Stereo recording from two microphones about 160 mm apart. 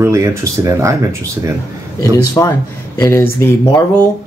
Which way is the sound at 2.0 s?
20° left (ahead or behind).